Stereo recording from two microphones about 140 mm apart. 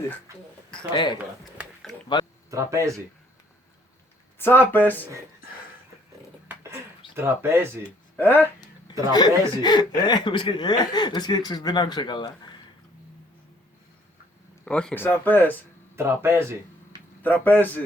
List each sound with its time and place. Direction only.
0.9 s speech: 35° left (ahead or behind)
2.5 s speech: 20° right (ahead or behind)
4.4 s speech: 15° left (ahead or behind)
7.2 s speech: 15° right (ahead or behind)
8.1 s speech: 15° left (ahead or behind)
9.1 s speech: 30° left (ahead or behind)
14.6 s speech: 5° left (ahead or behind)
16.0 s speech: 15° right (ahead or behind)
17.2 s speech: 10° left (ahead or behind)